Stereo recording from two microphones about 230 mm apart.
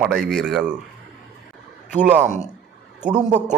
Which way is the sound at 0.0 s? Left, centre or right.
Centre.